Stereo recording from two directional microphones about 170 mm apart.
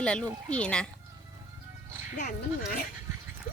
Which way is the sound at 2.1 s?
45° left (ahead or behind).